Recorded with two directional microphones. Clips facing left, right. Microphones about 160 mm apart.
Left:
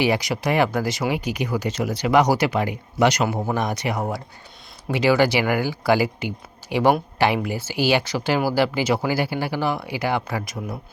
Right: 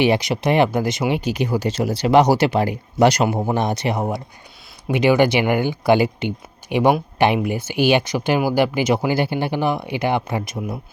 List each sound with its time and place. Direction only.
0.0 s speech: 25° right (ahead or behind)